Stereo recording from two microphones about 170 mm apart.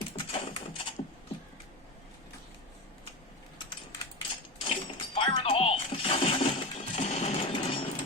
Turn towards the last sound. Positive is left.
turn(degrees=35)  # may be behind; listen again after turning